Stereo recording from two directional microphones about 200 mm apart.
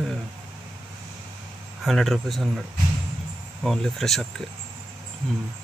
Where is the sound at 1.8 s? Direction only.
Centre (ahead or behind).